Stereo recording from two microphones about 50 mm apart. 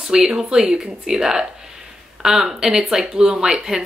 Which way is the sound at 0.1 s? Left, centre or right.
Centre.